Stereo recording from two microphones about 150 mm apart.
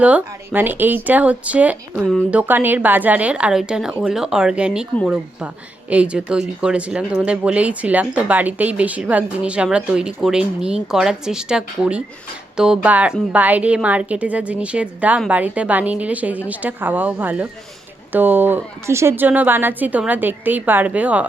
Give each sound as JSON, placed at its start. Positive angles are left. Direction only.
{"t": 0.0, "sound": "speech", "side_deg": -10}